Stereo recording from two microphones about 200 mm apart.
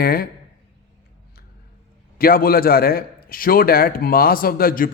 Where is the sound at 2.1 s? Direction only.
45° left (ahead or behind).